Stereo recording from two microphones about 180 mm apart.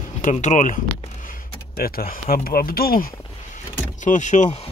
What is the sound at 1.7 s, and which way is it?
Speech, 55° left (ahead or behind).